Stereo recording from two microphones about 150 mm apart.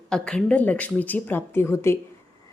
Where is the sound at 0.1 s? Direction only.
5° left (ahead or behind).